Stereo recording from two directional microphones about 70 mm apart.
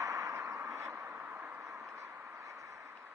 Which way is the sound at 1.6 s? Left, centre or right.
Right.